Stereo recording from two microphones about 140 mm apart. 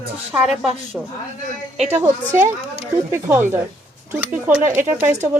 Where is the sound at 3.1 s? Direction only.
15° right (ahead or behind).